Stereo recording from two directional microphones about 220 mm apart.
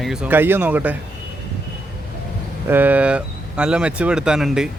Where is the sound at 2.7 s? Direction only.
10° right (ahead or behind).